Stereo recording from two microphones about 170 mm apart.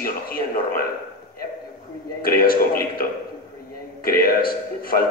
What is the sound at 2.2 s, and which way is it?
Speech, 60° left (ahead or behind).